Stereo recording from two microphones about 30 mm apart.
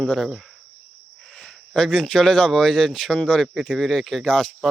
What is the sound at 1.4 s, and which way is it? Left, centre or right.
Speech, left.